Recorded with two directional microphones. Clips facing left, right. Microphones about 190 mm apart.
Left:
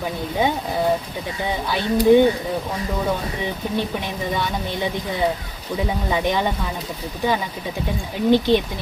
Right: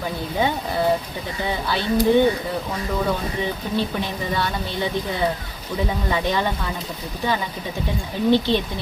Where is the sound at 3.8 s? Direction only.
15° left (ahead or behind).